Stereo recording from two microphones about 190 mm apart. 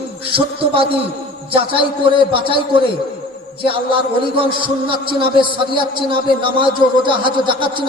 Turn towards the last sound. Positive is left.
turn(degrees=-25)  # may be behind; listen again after turning